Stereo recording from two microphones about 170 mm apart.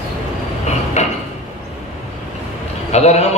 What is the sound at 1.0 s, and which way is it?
Speech, 40° left (ahead or behind).